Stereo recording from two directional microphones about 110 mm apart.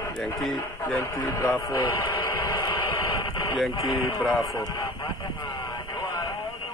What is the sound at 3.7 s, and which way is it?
Speech, 40° left (ahead or behind).